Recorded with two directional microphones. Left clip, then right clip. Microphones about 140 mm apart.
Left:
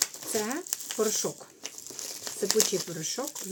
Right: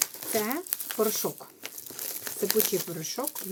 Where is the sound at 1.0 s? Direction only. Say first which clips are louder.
Right 1 dB; 10° right (ahead or behind).